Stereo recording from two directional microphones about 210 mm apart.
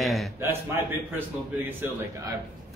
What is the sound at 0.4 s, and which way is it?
A man's voice, 10° right (ahead or behind).